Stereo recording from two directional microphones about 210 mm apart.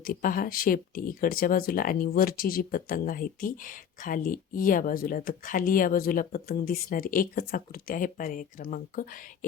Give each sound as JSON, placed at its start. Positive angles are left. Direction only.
{"t": 0.0, "sound": "speech", "side_deg": 40}